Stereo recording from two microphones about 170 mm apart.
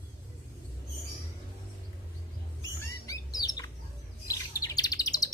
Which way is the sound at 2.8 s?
20° left (ahead or behind).